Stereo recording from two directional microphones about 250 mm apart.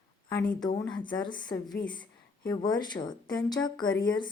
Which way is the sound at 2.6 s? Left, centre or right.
Centre.